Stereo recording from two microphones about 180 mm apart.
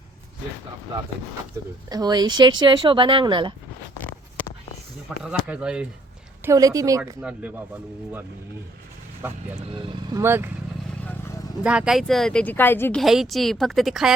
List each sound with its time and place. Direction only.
1.9 s speech: 20° right (ahead or behind)
5.0 s speech: 5° right (ahead or behind)
6.4 s speech: 20° right (ahead or behind)
7.2 s speech: 5° right (ahead or behind)
9.2 s speech: 10° right (ahead or behind)
9.7 s speech: 25° right (ahead or behind)
11.6 s speech: 5° right (ahead or behind); by 13.0 s 10° left (ahead or behind)
13.0 s speech: centre (ahead or behind)